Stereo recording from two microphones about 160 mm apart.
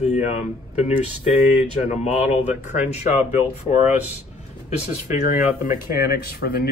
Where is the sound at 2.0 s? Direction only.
45° left (ahead or behind).